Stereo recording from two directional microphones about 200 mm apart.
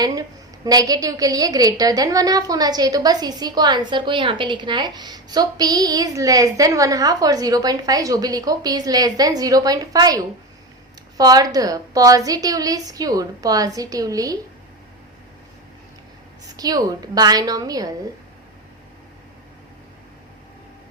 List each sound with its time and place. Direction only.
0.0 s a woman's voice: 20° right (ahead or behind)
16.6 s a woman's voice: 20° right (ahead or behind)